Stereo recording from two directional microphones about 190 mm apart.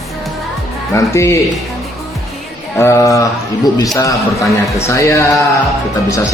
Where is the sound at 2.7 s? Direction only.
15° left (ahead or behind).